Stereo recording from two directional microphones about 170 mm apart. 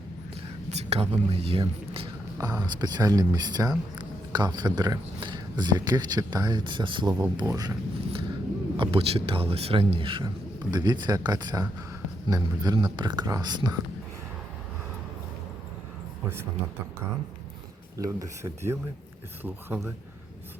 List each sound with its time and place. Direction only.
0.7 s speech: 40° right (ahead or behind); by 8.2 s 25° right (ahead or behind)
8.8 s speech: 35° right (ahead or behind)
17.9 s speech: 20° right (ahead or behind)